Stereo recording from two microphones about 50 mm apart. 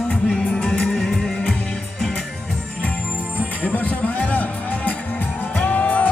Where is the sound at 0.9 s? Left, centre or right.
Centre.